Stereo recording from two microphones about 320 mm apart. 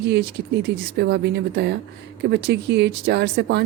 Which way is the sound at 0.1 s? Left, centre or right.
Right.